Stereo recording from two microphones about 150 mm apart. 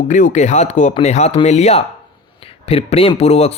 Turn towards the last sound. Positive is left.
turn(degrees=45)  # may be behind; listen again after turning